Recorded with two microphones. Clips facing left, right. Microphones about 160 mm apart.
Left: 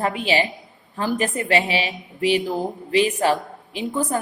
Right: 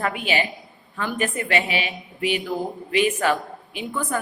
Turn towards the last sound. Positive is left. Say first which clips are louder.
# left 4 dB
turn(degrees=35)  # may be behind; listen again after turning